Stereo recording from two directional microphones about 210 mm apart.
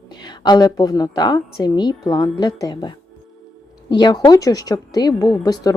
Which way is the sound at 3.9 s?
20° left (ahead or behind).